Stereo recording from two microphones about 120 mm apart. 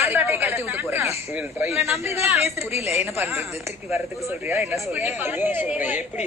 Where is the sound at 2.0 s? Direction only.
60° left (ahead or behind).